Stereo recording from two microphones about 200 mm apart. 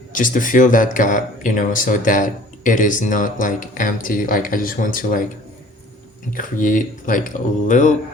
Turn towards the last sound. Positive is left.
turn(degrees=40)  # may be behind; listen again after turning